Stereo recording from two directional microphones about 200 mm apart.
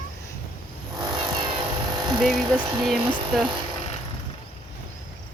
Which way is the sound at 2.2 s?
Centre (ahead or behind).